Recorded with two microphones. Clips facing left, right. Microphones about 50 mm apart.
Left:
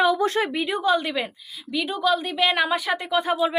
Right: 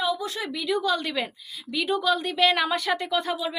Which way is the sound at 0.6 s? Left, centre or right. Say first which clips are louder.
Even; left.